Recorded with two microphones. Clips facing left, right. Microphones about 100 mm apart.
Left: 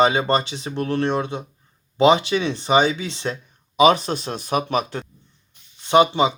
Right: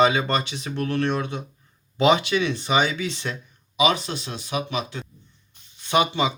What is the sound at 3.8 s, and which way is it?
Speech, 40° left (ahead or behind).